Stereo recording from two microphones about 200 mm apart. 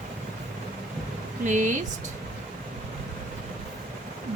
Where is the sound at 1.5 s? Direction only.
40° right (ahead or behind).